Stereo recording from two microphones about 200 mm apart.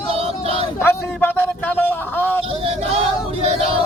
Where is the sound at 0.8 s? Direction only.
10° left (ahead or behind).